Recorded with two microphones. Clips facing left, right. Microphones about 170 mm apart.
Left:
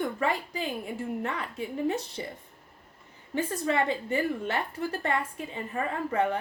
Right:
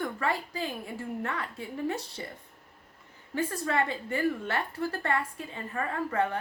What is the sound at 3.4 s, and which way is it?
A woman's voice, 20° left (ahead or behind).